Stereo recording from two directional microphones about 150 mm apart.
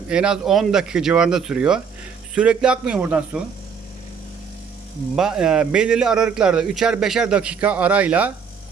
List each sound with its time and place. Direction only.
0.1 s a man's voice: 5° right (ahead or behind)
5.1 s a man's voice: 5° right (ahead or behind)